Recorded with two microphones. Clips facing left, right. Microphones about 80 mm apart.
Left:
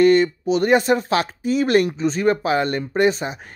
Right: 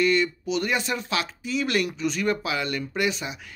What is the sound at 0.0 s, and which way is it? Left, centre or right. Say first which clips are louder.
Speech: left 8 dB; left.